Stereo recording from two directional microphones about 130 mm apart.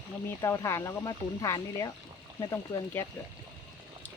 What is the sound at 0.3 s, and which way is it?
Speech, 20° left (ahead or behind).